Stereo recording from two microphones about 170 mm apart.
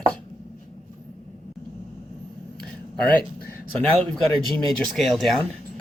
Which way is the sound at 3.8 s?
5° left (ahead or behind).